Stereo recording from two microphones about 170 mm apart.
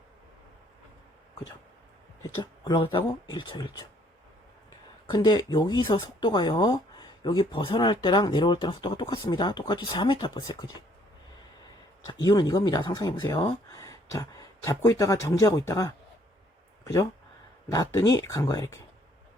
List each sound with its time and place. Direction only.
2.3 s speech: 25° left (ahead or behind)
5.0 s speech: 25° left (ahead or behind)
12.2 s speech: 25° left (ahead or behind)